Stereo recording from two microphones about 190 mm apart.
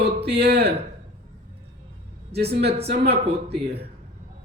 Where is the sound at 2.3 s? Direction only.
60° right (ahead or behind).